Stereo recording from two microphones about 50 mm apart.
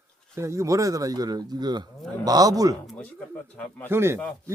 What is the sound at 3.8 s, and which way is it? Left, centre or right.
Speech, right.